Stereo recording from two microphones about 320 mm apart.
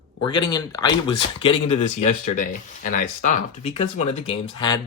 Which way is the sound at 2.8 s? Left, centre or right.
Left.